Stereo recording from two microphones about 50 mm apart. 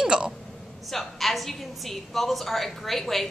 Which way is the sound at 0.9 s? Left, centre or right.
Centre.